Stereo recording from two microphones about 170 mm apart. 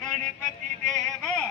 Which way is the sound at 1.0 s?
Centre (ahead or behind).